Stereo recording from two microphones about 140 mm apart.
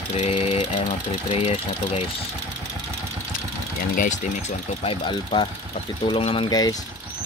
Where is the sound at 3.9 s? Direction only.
70° left (ahead or behind).